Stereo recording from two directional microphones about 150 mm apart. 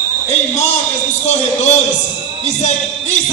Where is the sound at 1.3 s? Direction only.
50° left (ahead or behind).